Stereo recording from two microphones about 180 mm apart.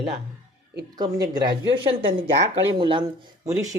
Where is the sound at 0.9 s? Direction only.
20° right (ahead or behind).